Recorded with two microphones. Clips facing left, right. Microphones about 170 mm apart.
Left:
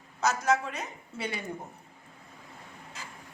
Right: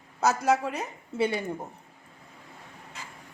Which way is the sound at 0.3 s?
35° right (ahead or behind).